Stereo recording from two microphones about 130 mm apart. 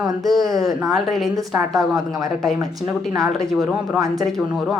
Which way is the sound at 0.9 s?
Centre (ahead or behind).